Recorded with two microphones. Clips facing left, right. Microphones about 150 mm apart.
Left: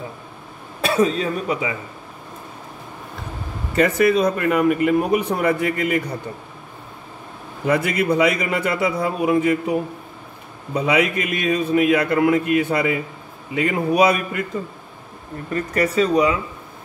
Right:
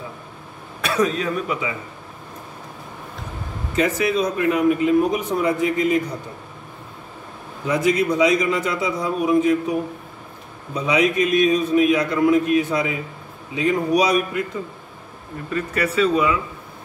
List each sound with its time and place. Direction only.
0.7 s speech: 30° left (ahead or behind)
3.7 s speech: 60° left (ahead or behind)
7.6 s speech: 60° left (ahead or behind)
10.7 s speech: 60° left (ahead or behind)
15.7 s speech: 40° left (ahead or behind)